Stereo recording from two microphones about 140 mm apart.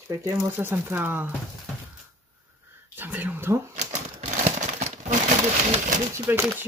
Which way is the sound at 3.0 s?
10° right (ahead or behind).